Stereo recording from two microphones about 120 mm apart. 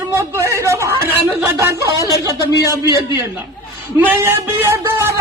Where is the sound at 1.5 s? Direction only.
30° right (ahead or behind).